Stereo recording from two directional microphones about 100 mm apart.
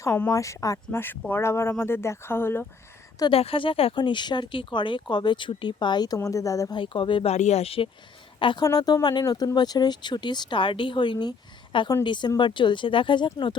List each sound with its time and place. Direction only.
0.0 s speech: 30° left (ahead or behind)
0.9 s speech: 20° left (ahead or behind)
3.2 s speech: 70° left (ahead or behind)
3.9 s speech: 50° left (ahead or behind)
6.1 s speech: 30° left (ahead or behind)
6.7 s speech: 55° left (ahead or behind); by 7.9 s 80° left
8.4 s a woman's voice: 55° left (ahead or behind)
8.6 s speech: 40° left (ahead or behind)